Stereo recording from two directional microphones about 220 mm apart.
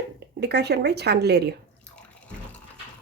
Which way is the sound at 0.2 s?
50° right (ahead or behind).